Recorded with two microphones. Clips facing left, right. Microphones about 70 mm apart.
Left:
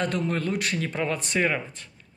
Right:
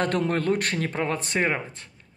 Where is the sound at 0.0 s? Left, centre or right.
Right.